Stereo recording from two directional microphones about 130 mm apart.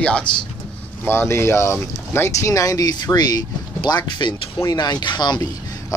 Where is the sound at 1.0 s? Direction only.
20° left (ahead or behind).